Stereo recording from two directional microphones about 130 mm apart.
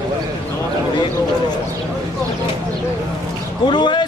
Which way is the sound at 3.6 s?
35° left (ahead or behind).